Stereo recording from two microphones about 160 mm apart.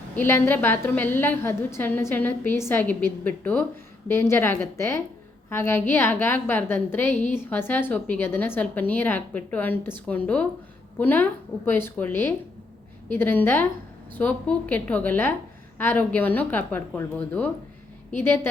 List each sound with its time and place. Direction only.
0.2 s a woman's voice: 15° left (ahead or behind)
7.1 s a woman's voice: 50° left (ahead or behind)
7.3 s a woman's voice: 15° left (ahead or behind)